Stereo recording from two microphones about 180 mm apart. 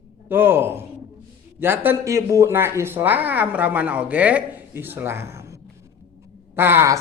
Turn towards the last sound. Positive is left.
turn(degrees=-15)  # may be behind; listen again after turning